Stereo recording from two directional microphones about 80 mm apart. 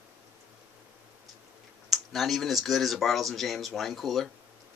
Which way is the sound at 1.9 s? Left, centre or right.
Centre.